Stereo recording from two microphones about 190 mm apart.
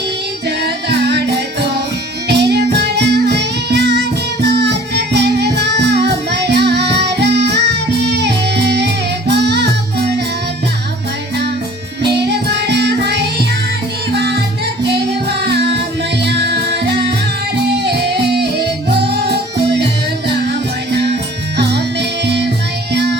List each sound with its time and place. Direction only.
0.4 s music: 60° right (ahead or behind)
12.0 s music: 60° right (ahead or behind)
22.2 s music: 60° right (ahead or behind)